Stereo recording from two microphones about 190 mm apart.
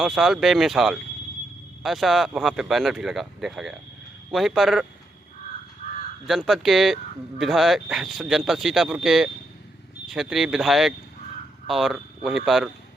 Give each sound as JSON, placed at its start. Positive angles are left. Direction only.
{"t": 0.0, "sound": "speech", "side_deg": 0}
{"t": 5.8, "sound": "crow", "side_deg": 40}
{"t": 6.2, "sound": "speech", "side_deg": 0}